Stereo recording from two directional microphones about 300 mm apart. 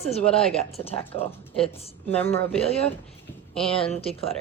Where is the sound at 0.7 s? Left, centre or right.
Centre.